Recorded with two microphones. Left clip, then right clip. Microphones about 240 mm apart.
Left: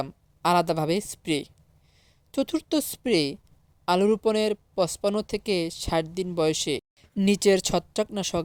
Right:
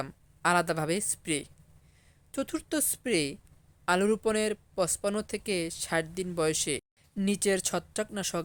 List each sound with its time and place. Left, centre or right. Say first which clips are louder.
0.0 s a woman's voice: left 3 dB; centre